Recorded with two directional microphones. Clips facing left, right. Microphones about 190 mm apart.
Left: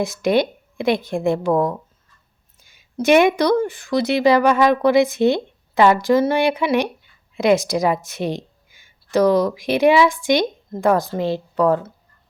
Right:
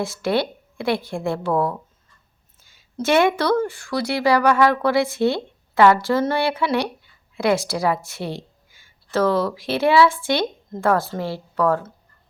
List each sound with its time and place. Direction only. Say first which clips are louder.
0.0 s a woman's voice: left 4 dB; 15° left (ahead or behind)